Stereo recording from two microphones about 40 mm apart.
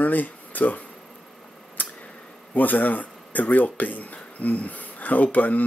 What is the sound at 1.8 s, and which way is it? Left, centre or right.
Tick, left.